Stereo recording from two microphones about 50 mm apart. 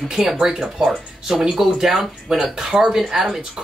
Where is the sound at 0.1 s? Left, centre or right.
Centre.